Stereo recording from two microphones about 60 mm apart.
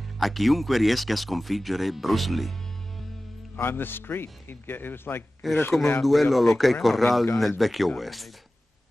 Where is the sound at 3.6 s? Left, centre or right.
Left.